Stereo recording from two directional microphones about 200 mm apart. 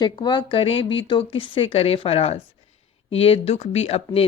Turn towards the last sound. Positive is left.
turn(degrees=30)  # may be behind; listen again after turning